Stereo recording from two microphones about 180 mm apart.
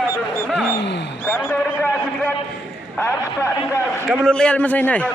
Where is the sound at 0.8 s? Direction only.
75° left (ahead or behind).